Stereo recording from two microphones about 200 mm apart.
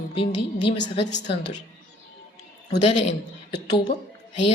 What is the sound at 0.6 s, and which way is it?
Speech, 60° left (ahead or behind).